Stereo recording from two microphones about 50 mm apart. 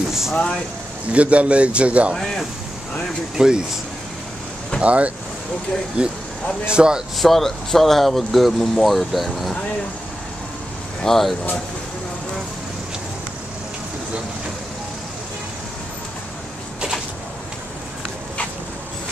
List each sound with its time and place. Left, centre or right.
0.1 s speech: centre
1.1 s a man's voice: right
2.1 s speech: centre
3.3 s speech: centre
4.8 s a man's voice: right
7.2 s speech: centre
11.1 s speech: centre